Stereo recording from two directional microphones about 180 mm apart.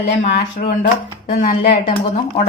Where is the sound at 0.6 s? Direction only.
50° left (ahead or behind).